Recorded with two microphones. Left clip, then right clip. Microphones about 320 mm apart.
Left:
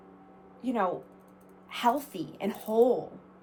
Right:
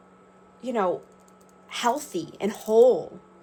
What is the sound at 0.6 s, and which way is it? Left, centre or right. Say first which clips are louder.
Speech: right 4 dB; right.